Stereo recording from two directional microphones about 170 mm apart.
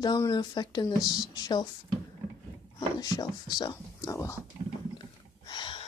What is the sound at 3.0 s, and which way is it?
Speech, 25° left (ahead or behind).